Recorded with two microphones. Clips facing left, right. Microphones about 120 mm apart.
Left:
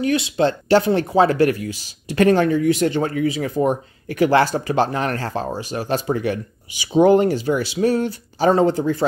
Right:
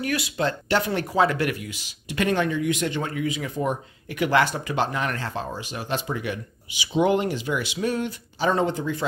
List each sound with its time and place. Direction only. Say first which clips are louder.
0.0 s speech: left 7 dB; 25° left (ahead or behind)